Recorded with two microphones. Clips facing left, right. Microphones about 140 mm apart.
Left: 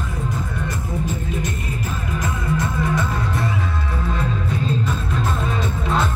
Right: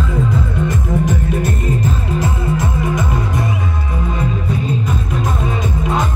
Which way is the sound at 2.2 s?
25° right (ahead or behind).